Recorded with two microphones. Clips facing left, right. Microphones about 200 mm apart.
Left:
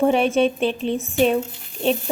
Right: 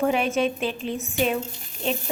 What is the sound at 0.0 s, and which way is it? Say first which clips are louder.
A woman's voice: left 5 dB; 30° left (ahead or behind).